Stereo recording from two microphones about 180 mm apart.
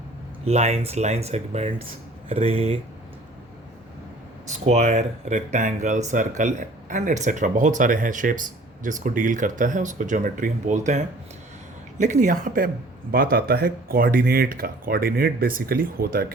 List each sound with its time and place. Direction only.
0.4 s speech: 35° right (ahead or behind)
4.6 s speech: 40° right (ahead or behind); by 16.2 s 55° right (ahead or behind)